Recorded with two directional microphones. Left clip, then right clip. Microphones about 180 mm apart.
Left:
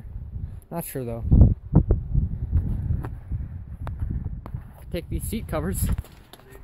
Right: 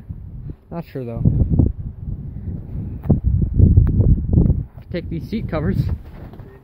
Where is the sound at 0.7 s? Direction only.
30° left (ahead or behind).